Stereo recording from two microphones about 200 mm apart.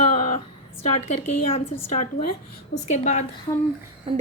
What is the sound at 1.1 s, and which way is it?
A woman's voice, 30° left (ahead or behind).